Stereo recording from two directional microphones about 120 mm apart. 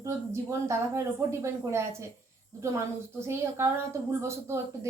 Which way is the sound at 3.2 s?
20° right (ahead or behind).